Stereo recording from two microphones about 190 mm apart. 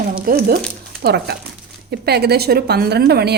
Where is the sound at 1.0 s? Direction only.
60° right (ahead or behind).